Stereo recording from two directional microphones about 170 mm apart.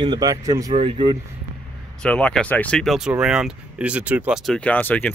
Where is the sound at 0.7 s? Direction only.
35° right (ahead or behind).